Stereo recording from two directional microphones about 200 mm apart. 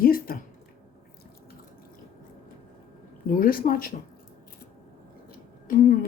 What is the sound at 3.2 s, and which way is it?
Speech, 45° left (ahead or behind).